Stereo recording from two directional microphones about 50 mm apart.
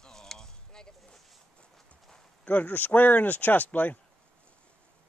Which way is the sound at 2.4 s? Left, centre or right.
Left.